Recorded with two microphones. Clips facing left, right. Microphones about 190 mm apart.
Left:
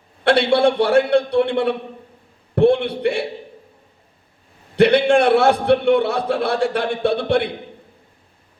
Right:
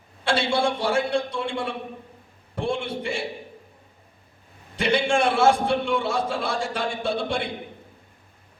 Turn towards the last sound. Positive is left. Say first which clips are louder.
# left 8 dB
turn(degrees=60)  # may be behind; listen again after turning